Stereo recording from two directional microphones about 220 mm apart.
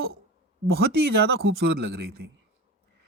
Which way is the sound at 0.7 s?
45° right (ahead or behind).